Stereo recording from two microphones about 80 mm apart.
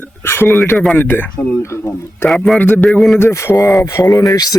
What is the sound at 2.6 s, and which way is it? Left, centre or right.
Speech, left.